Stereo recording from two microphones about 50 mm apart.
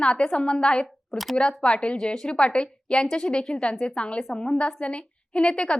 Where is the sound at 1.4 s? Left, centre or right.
Centre.